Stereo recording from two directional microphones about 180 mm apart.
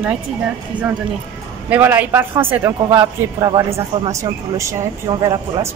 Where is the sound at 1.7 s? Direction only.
10° right (ahead or behind).